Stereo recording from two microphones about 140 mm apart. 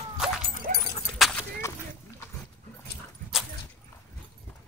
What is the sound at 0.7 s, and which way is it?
Dog, 75° right (ahead or behind).